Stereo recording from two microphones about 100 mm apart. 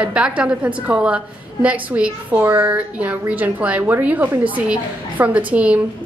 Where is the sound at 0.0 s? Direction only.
10° right (ahead or behind).